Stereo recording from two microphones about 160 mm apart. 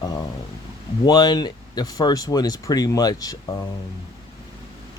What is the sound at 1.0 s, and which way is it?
Speech, 25° left (ahead or behind).